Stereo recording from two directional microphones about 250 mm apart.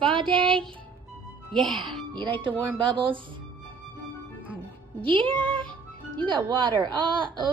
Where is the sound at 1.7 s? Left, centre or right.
Centre.